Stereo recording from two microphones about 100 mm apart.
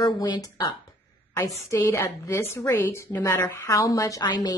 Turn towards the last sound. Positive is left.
turn(degrees=40)  # may be behind; listen again after turning